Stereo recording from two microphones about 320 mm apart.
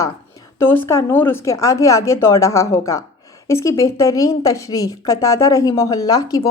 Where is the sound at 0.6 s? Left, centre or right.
Centre.